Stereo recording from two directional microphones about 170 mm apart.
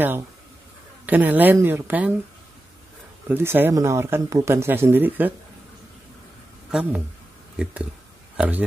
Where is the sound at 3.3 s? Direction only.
15° right (ahead or behind).